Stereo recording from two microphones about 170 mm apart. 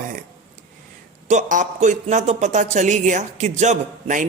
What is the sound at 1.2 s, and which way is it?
Speech, 45° right (ahead or behind).